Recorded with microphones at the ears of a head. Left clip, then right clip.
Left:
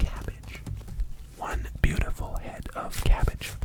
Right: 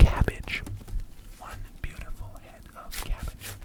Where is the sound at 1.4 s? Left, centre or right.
Left.